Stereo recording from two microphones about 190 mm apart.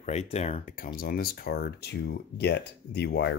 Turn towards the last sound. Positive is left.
turn(degrees=60)  # may be behind; listen again after turning